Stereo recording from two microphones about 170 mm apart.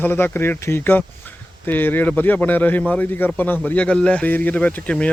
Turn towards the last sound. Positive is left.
turn(degrees=10)  # may be behind; listen again after turning